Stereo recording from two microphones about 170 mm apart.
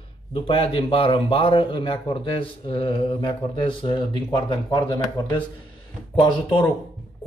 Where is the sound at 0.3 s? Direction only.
30° left (ahead or behind).